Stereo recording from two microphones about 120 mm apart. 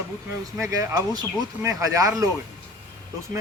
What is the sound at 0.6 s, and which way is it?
Speech, 25° right (ahead or behind).